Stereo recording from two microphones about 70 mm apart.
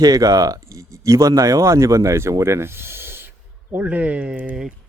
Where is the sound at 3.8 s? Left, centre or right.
Centre.